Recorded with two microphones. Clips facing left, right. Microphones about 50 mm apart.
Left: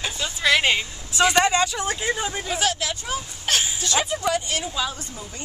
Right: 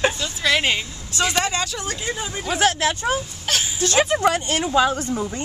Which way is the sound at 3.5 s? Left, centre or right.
Centre.